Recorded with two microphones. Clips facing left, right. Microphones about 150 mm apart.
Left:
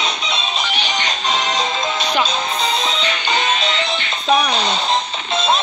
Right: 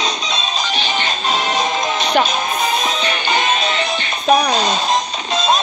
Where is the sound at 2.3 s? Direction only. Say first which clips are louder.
Right 2 dB; 25° left (ahead or behind).